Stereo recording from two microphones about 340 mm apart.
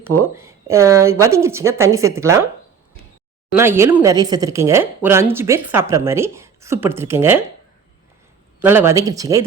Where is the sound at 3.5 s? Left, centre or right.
Centre.